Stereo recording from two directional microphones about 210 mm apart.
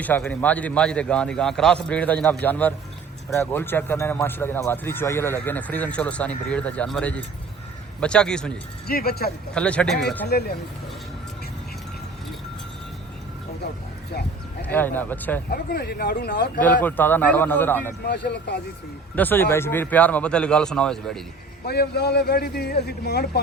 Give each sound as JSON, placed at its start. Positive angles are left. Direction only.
{"t": 0.0, "sound": "a man's voice", "side_deg": 5}
{"t": 8.9, "sound": "a man's voice", "side_deg": 45}
{"t": 9.6, "sound": "a man's voice", "side_deg": 5}
{"t": 10.2, "sound": "a man's voice", "side_deg": 50}
{"t": 14.6, "sound": "speech", "side_deg": 10}
{"t": 15.4, "sound": "a man's voice", "side_deg": 45}
{"t": 16.6, "sound": "speech", "side_deg": 10}
{"t": 18.0, "sound": "a man's voice", "side_deg": 50}
{"t": 19.1, "sound": "speech", "side_deg": 10}
{"t": 21.7, "sound": "a man's voice", "side_deg": 50}